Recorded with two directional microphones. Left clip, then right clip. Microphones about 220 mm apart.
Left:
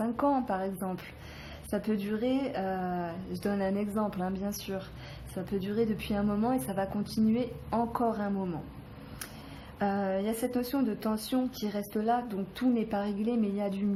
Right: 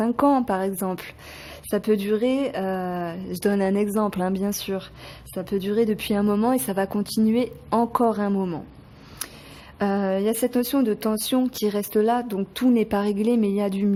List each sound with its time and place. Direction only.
0.0 s speech: 45° right (ahead or behind)
9.7 s speech: 50° right (ahead or behind)